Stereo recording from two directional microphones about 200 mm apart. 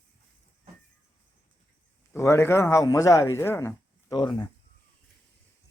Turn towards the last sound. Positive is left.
turn(degrees=25)  # may be behind; listen again after turning